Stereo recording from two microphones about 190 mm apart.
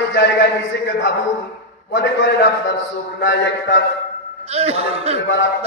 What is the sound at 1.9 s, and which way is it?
A man's voice, 75° left (ahead or behind).